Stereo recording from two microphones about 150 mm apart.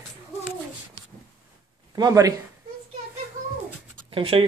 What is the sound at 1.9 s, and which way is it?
Speech, 25° right (ahead or behind).